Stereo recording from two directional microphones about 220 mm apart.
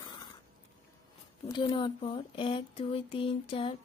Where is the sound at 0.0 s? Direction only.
20° left (ahead or behind).